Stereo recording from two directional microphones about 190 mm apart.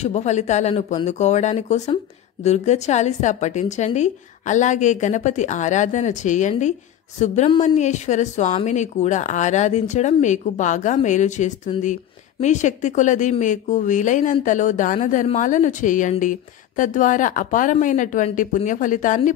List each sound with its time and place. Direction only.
0.0 s speech: 35° left (ahead or behind)